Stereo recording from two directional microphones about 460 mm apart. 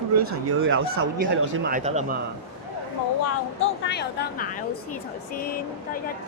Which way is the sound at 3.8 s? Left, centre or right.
Left.